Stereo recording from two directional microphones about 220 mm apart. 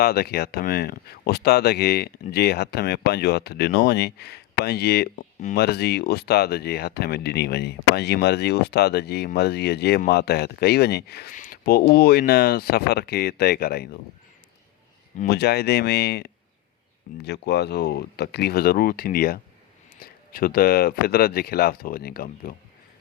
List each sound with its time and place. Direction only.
0.0 s speech: 45° left (ahead or behind)
15.2 s speech: 45° left (ahead or behind)